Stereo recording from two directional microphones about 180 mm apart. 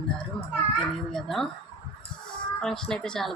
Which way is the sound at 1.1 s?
Centre (ahead or behind).